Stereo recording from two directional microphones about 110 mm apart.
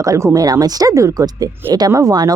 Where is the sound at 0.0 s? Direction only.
30° right (ahead or behind).